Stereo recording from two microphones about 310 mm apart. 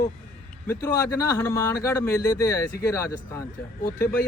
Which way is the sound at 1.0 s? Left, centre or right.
Centre.